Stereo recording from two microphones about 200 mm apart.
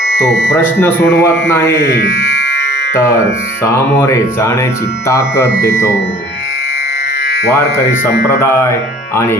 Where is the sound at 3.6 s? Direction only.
15° left (ahead or behind).